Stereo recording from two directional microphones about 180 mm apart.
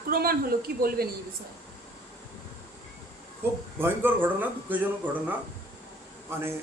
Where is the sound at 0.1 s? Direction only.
55° right (ahead or behind).